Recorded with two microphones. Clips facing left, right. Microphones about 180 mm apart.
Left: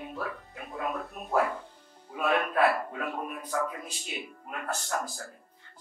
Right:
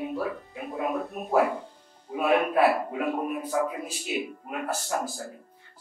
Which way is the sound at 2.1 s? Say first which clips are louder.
Right 4 dB; 10° right (ahead or behind).